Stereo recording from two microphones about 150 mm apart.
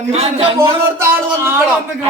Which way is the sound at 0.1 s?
45° right (ahead or behind).